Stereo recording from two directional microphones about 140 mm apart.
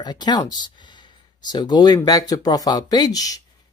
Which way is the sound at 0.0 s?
30° left (ahead or behind).